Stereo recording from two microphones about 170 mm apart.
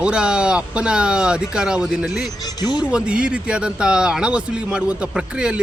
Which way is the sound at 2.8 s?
5° right (ahead or behind).